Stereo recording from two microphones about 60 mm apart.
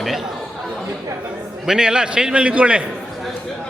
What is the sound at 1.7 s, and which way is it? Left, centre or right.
A man's voice, centre.